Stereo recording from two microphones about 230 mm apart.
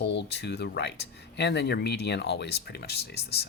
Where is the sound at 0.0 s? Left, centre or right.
Left.